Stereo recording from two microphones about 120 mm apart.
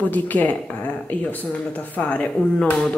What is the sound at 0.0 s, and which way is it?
Speech, 15° left (ahead or behind).